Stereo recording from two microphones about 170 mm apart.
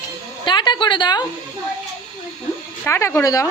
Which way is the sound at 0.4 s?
25° left (ahead or behind).